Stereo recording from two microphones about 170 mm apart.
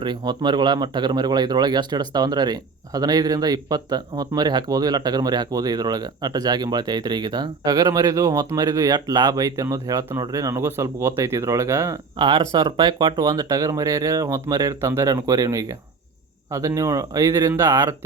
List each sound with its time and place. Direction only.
0.0 s speech: 25° right (ahead or behind)